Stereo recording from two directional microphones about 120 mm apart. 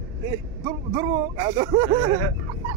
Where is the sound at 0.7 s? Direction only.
45° right (ahead or behind).